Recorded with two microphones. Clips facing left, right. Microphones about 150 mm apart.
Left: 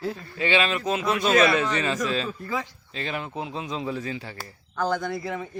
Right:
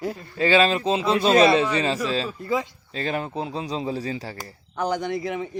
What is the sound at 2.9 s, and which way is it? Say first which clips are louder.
Speech: right 4 dB; 40° right (ahead or behind).